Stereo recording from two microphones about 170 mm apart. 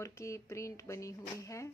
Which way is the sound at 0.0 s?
15° left (ahead or behind).